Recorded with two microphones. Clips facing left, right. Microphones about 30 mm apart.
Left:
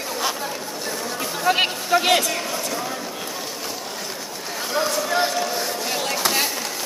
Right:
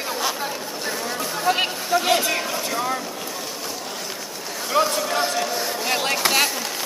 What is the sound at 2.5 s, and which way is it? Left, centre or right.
Vehicle, centre.